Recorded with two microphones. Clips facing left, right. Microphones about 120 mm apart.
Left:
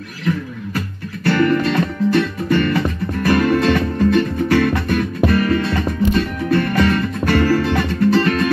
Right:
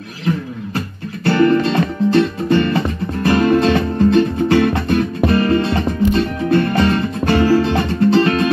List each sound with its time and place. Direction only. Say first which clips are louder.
0.7 s music: right 1 dB; 25° right (ahead or behind)